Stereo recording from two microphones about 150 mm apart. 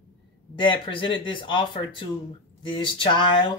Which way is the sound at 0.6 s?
35° left (ahead or behind).